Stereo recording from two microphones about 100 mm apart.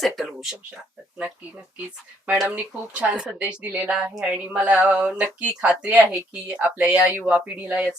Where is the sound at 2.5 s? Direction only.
15° right (ahead or behind).